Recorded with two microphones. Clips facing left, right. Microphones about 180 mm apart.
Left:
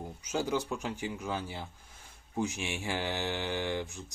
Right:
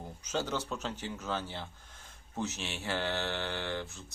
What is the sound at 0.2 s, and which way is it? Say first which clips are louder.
Speech: left 3 dB; 10° left (ahead or behind).